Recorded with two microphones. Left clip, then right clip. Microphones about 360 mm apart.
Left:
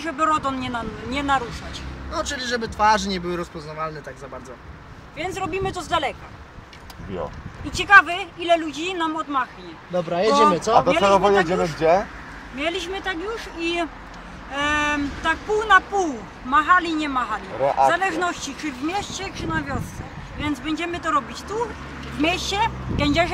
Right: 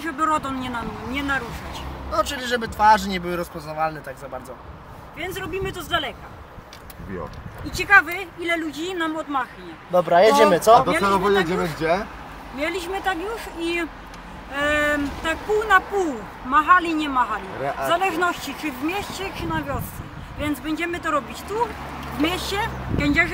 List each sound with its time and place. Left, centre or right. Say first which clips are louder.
0.0 s speech: left 1 dB; centre
1.1 s speech: left 3 dB; centre
2.1 s speech: right 2 dB; centre
5.2 s speech: left 3 dB; centre
7.7 s speech: left 2 dB; centre
10.1 s speech: right 2 dB; centre
10.9 s speech: left 3 dB; centre